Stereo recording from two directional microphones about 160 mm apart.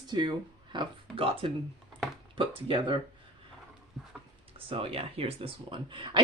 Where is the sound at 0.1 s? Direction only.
30° right (ahead or behind).